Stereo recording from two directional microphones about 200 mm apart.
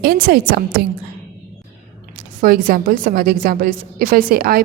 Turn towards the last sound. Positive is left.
turn(degrees=-50)  # may be behind; listen again after turning